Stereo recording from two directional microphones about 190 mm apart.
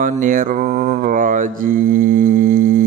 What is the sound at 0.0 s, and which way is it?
Mantra, 45° right (ahead or behind).